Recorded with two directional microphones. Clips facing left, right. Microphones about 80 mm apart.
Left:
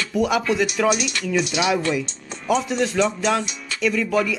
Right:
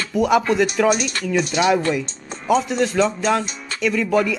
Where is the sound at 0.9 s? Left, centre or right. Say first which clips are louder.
Right 2 dB; right.